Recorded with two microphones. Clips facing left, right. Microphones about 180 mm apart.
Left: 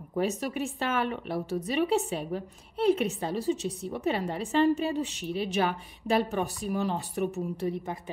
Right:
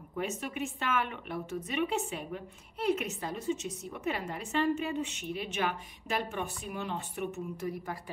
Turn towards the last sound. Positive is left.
turn(degrees=25)  # may be behind; listen again after turning